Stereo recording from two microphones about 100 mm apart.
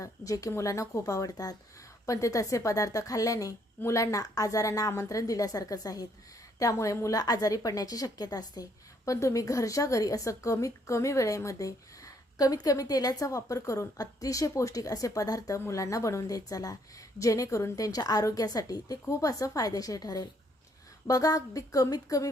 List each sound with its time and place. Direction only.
0.0 s a woman's voice: 35° left (ahead or behind)